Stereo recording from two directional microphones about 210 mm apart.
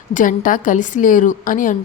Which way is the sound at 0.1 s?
40° left (ahead or behind).